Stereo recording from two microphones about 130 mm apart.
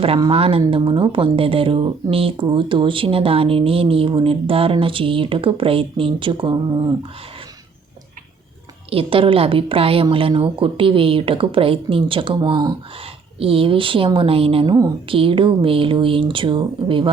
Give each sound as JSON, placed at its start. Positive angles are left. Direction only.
{"t": 0.3, "sound": "speech", "side_deg": -45}
{"t": 8.9, "sound": "speech", "side_deg": -45}
{"t": 13.4, "sound": "speech", "side_deg": -45}